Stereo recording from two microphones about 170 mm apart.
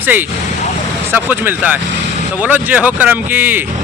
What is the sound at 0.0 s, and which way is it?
Speech, 10° right (ahead or behind).